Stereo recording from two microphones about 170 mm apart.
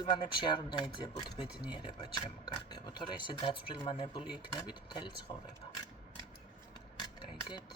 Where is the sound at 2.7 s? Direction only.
25° left (ahead or behind).